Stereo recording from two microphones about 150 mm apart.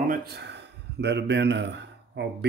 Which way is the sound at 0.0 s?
80° right.